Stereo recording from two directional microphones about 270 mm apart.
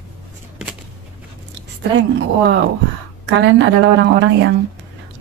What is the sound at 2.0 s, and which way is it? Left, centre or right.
Speech, right.